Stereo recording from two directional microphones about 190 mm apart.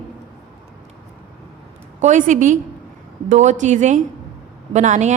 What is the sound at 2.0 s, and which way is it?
A woman's voice, 40° right (ahead or behind).